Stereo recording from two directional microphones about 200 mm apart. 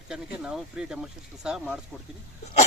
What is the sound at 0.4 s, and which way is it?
Speech, 5° right (ahead or behind).